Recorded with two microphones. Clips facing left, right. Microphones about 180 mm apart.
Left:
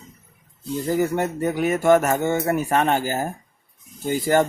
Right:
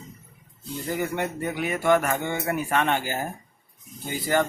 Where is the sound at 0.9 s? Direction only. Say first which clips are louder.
Left 6 dB; 40° left (ahead or behind).